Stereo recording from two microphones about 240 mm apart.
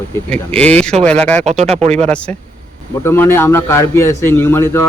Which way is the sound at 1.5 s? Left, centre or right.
Right.